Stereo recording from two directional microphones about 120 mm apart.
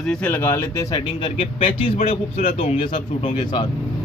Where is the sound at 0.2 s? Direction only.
20° left (ahead or behind).